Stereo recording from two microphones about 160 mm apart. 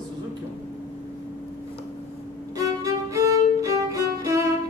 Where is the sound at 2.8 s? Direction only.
20° right (ahead or behind).